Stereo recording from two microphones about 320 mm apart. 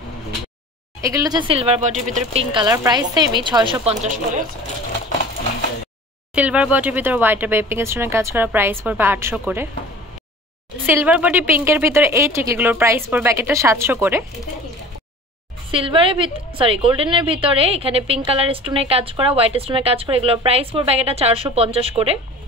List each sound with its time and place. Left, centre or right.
1.0 s a woman's voice: centre
6.3 s a woman's voice: centre
10.9 s a woman's voice: centre
15.7 s a woman's voice: centre